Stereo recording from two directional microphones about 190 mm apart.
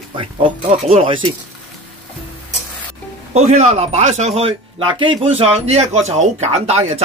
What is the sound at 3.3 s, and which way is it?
Speech, 35° right (ahead or behind).